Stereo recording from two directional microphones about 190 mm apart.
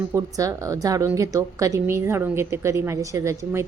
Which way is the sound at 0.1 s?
15° right (ahead or behind).